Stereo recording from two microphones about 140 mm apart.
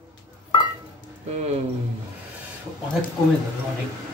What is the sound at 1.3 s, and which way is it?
Speech, 50° right (ahead or behind).